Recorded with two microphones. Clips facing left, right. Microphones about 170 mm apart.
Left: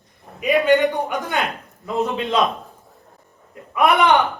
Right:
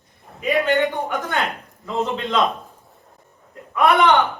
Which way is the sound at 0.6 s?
15° left (ahead or behind).